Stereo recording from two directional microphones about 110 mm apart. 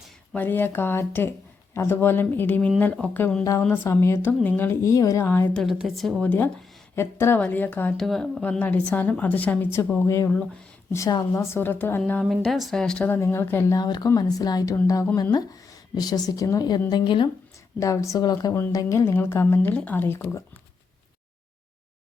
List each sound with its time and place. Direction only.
0.3 s speech: 15° left (ahead or behind)
5.7 s speech: 5° right (ahead or behind)
6.2 s a woman's voice: 15° left (ahead or behind)
7.9 s speech: 5° left (ahead or behind)
8.4 s a woman's voice: 15° left (ahead or behind)
10.0 s speech: 25° left (ahead or behind)
10.2 s speech: 5° left (ahead or behind)
10.9 s speech: 30° left (ahead or behind)
12.2 s speech: centre (ahead or behind)
13.1 s speech: 25° left (ahead or behind)
13.7 s a woman's voice: 40° left (ahead or behind)
17.7 s speech: 30° left (ahead or behind)